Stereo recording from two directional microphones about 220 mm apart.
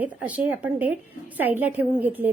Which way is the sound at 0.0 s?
5° right (ahead or behind).